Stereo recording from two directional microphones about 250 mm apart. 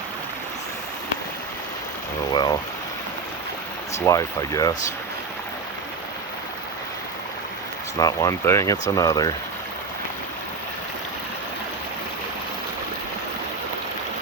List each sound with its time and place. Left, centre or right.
2.3 s speech: centre
3.9 s speech: centre
7.9 s speech: centre